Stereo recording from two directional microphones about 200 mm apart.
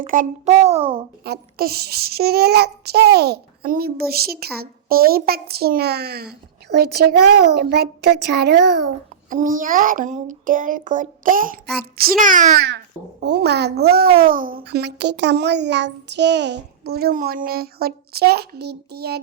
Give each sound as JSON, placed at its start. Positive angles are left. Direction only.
{"t": 0.0, "sound": "a child's voice", "side_deg": -40}
{"t": 1.2, "sound": "a child's voice", "side_deg": -50}
{"t": 9.3, "sound": "a child's voice", "side_deg": -40}
{"t": 12.6, "sound": "a child's voice", "side_deg": -55}